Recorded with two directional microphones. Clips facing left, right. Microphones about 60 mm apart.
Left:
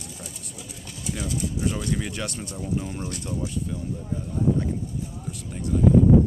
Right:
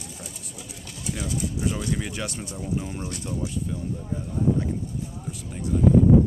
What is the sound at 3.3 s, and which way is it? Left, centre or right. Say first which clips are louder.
Speech: even; centre.